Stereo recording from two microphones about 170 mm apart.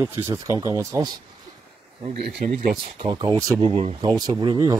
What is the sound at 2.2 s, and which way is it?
Speech, 60° right (ahead or behind).